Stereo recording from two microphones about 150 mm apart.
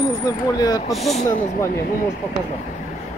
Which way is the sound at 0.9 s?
Centre (ahead or behind).